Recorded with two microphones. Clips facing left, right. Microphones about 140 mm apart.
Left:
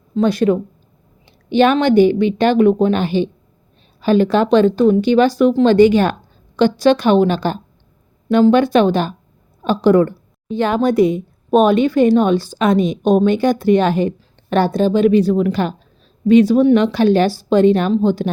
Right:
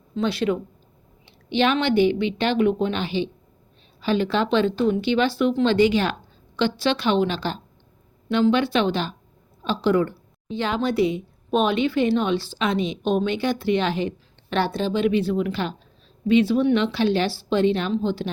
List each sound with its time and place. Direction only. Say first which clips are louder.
0.2 s a woman's voice: left 8 dB; 45° left (ahead or behind)